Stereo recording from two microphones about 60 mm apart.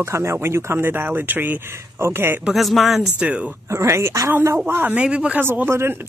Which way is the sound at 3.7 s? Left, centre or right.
Right.